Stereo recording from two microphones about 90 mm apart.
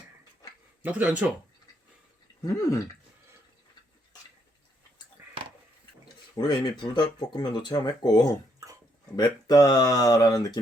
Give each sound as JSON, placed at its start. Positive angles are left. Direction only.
{"t": 0.8, "sound": "speech", "side_deg": -15}
{"t": 2.4, "sound": "a sound", "side_deg": 40}
{"t": 5.2, "sound": "a sound", "side_deg": -25}
{"t": 6.4, "sound": "speech", "side_deg": 55}
{"t": 8.6, "sound": "dog", "side_deg": -40}
{"t": 9.1, "sound": "speech", "side_deg": 45}